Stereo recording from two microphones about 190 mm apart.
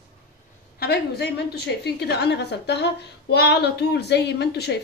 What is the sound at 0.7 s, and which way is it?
A woman's voice, 55° left (ahead or behind).